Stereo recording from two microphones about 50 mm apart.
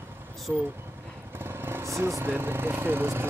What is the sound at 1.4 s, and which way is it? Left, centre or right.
Vehicle, right.